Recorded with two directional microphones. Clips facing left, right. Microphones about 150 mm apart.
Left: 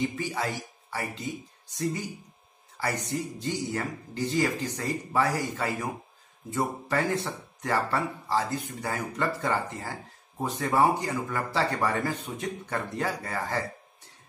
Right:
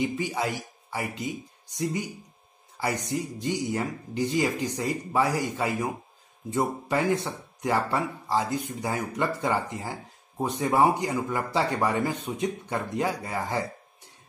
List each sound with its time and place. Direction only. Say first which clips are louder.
0.0 s speech: right 2 dB; 15° right (ahead or behind)